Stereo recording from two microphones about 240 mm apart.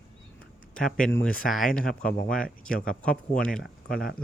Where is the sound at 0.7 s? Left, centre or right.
Centre.